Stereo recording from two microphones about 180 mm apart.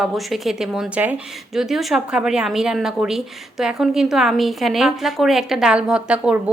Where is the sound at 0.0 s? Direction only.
Centre (ahead or behind).